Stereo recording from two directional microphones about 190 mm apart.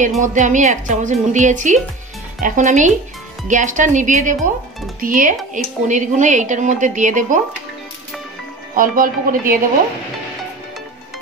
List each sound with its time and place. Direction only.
0.2 s a woman's voice: 40° right (ahead or behind)
8.7 s speech: 45° right (ahead or behind)